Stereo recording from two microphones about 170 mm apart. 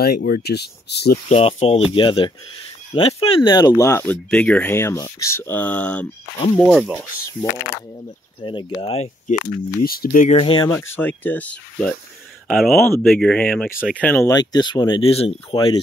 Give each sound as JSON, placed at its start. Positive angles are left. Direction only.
{"t": 0.0, "sound": "speech", "side_deg": 65}
{"t": 1.3, "sound": "speech", "side_deg": 40}
{"t": 8.4, "sound": "speech", "side_deg": 25}
{"t": 8.7, "sound": "speech", "side_deg": 40}
{"t": 9.8, "sound": "speech", "side_deg": 55}
{"t": 10.3, "sound": "speech", "side_deg": 30}
{"t": 10.7, "sound": "speech", "side_deg": 15}
{"t": 14.2, "sound": "speech", "side_deg": 25}
{"t": 15.5, "sound": "speech", "side_deg": 25}